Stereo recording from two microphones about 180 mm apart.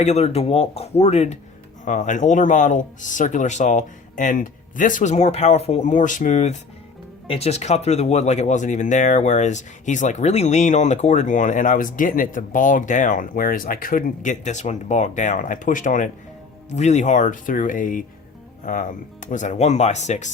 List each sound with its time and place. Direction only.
0.0 s speech: 35° left (ahead or behind)